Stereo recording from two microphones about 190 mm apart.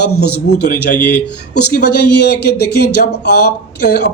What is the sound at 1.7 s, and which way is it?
Speech, 55° left (ahead or behind).